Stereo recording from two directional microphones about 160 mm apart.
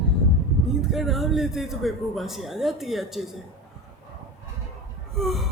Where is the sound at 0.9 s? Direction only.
Centre (ahead or behind).